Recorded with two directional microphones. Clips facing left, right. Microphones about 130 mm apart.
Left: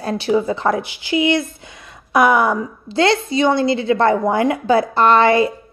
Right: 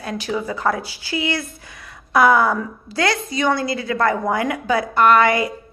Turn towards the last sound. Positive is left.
turn(degrees=30)  # may be behind; listen again after turning